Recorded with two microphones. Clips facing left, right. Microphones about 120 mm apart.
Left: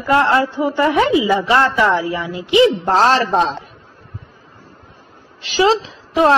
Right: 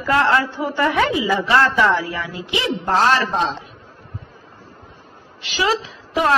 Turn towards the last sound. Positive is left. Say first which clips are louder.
# left 5 dB
turn(degrees=25)  # may be behind; listen again after turning